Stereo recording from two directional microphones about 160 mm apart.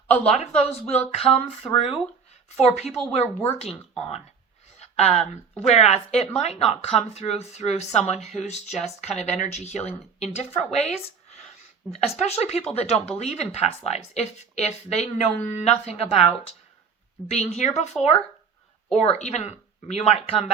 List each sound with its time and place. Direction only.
0.1 s speech: 40° left (ahead or behind)
17.2 s speech: 40° left (ahead or behind)
18.0 s speech: centre (ahead or behind)
19.0 s speech: 40° left (ahead or behind)